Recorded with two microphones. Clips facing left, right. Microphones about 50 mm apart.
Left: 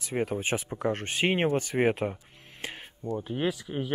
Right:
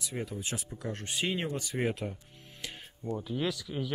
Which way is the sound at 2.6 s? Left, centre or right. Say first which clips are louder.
Left 3 dB; left.